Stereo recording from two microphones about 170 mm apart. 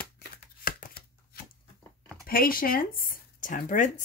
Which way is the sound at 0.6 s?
55° left (ahead or behind).